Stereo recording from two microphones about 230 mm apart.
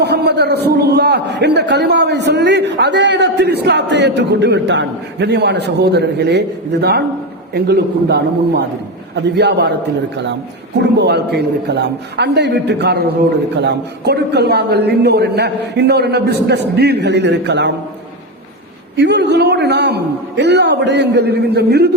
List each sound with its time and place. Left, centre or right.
0.0 s a man's voice: right
11.0 s a man's voice: right
18.9 s a man's voice: right